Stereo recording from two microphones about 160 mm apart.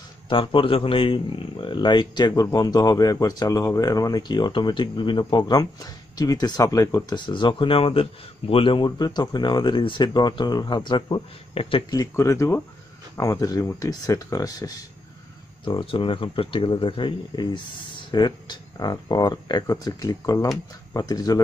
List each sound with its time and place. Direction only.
0.3 s a man's voice: 30° left (ahead or behind)
11.9 s a man's voice: 20° left (ahead or behind)
15.6 s a man's voice: 30° left (ahead or behind)